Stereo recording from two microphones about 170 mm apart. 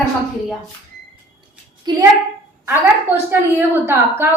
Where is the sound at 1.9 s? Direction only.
25° right (ahead or behind).